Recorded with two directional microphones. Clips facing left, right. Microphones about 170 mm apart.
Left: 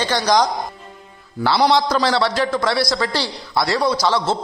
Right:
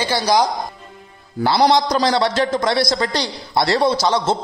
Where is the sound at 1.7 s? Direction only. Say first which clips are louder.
Right 1 dB; 15° right (ahead or behind).